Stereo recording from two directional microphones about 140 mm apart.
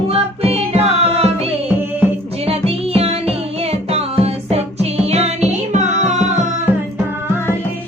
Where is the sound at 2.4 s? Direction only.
45° right (ahead or behind).